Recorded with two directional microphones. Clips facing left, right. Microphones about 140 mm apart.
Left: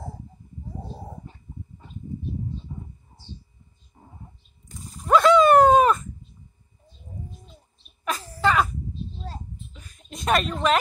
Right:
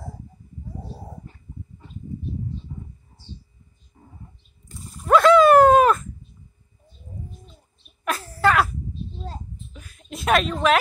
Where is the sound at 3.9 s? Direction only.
25° left (ahead or behind).